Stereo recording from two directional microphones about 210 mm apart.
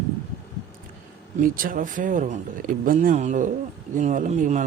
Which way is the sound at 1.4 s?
40° right (ahead or behind).